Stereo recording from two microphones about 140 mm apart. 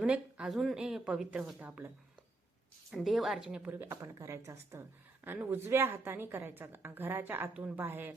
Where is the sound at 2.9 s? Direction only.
Centre (ahead or behind).